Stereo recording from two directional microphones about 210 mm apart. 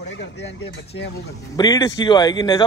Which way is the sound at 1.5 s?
15° left (ahead or behind).